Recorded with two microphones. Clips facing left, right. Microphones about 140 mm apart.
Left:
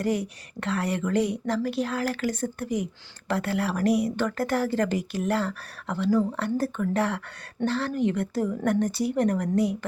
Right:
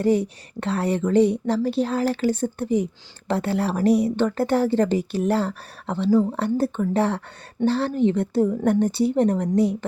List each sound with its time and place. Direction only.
0.0 s speech: 30° right (ahead or behind)